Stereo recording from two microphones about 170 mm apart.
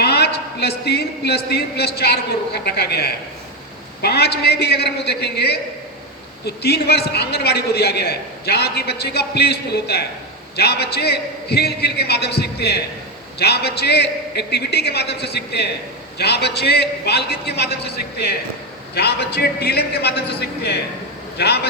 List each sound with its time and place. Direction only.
0.0 s a man's voice: 75° left (ahead or behind)